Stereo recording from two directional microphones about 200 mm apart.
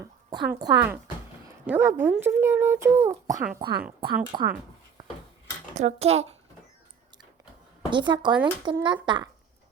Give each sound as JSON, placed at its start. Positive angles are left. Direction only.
{"t": 0.0, "sound": "speech", "side_deg": -20}
{"t": 1.5, "sound": "a child's voice", "side_deg": -10}
{"t": 3.3, "sound": "speech", "side_deg": -45}
{"t": 4.0, "sound": "speech", "side_deg": -25}
{"t": 5.7, "sound": "speech", "side_deg": -35}
{"t": 7.9, "sound": "speech", "side_deg": -25}